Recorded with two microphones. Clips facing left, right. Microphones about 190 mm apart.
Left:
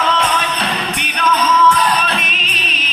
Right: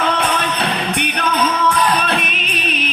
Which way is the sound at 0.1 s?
55° right (ahead or behind).